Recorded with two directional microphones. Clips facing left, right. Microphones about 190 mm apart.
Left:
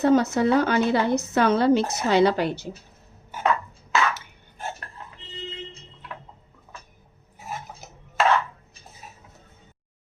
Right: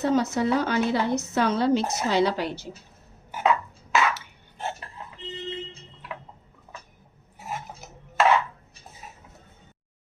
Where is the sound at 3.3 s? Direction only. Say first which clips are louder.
Right 1 dB; 15° right (ahead or behind).